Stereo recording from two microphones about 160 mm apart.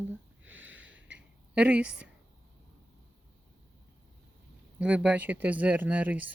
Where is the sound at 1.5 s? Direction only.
5° right (ahead or behind).